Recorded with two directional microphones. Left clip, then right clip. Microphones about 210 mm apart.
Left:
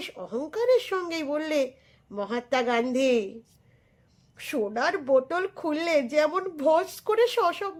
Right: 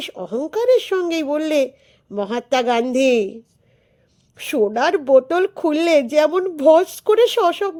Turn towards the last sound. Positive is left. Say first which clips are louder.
# right 8 dB
turn(degrees=-35)  # may be behind; listen again after turning